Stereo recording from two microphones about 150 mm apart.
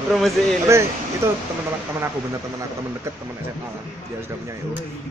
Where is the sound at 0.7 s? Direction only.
20° right (ahead or behind).